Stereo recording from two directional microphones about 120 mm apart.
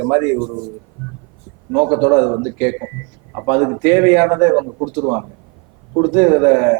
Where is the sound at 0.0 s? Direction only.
20° right (ahead or behind).